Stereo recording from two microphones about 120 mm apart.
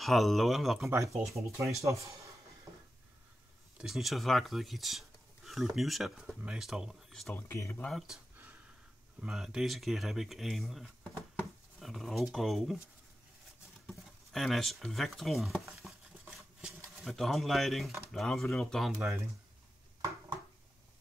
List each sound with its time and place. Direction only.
0.0 s speech: centre (ahead or behind)
0.8 s speech: 25° right (ahead or behind)
3.7 s speech: 5° right (ahead or behind)
7.3 s speech: 20° left (ahead or behind)
7.7 s speech: 10° left (ahead or behind)
9.2 s speech: 5° right (ahead or behind)
13.8 s a sound: centre (ahead or behind)
16.9 s speech: centre (ahead or behind)
18.9 s speech: 20° right (ahead or behind)